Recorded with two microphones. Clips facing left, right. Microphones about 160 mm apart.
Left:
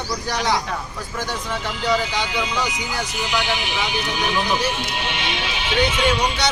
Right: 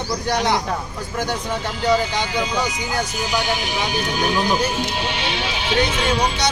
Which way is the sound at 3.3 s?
40° right (ahead or behind).